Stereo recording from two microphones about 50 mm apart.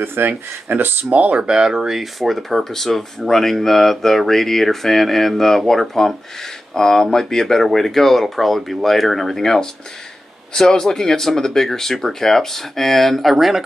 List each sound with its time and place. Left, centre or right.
0.0 s speech: right
1.1 s speech: right; by 13.6 s centre